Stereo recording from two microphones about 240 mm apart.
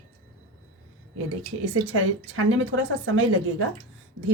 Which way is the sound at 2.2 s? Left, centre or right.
Right.